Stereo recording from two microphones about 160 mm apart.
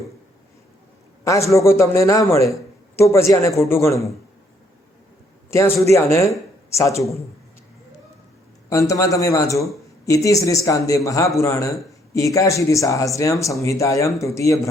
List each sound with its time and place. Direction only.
1.2 s a man's voice: 20° left (ahead or behind)
5.5 s a man's voice: 15° left (ahead or behind)
8.7 s a man's voice: 20° left (ahead or behind)